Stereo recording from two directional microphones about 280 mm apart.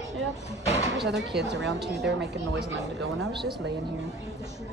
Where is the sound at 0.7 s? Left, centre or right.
Right.